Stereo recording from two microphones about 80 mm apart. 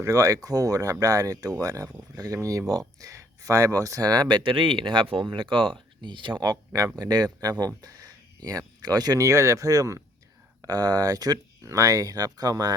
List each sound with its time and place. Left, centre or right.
0.0 s speech: right
6.0 s speech: right
7.8 s speech: right